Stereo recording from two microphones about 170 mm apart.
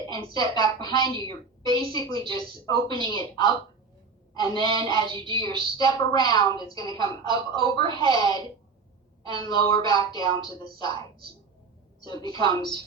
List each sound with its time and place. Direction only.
0.1 s a woman's voice: 25° left (ahead or behind)
12.0 s a woman's voice: 25° left (ahead or behind)